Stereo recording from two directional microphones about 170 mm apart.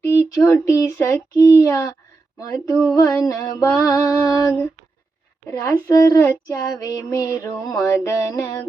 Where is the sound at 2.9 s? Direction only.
20° left (ahead or behind).